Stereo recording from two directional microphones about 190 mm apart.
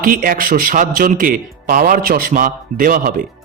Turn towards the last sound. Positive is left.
turn(degrees=-45)  # may be behind; listen again after turning